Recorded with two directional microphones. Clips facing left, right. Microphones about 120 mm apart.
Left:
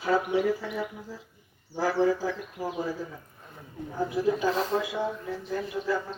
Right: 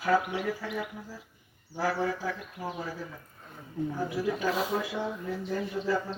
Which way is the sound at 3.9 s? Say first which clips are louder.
Left 7 dB; 25° left (ahead or behind).